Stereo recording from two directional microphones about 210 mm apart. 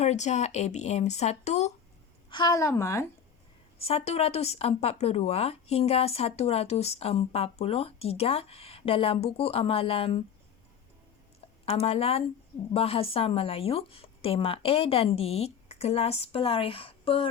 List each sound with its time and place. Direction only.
0.0 s speech: 30° left (ahead or behind)
2.3 s a woman's voice: 20° left (ahead or behind)
3.8 s speech: 30° left (ahead or behind)
11.6 s speech: 30° left (ahead or behind)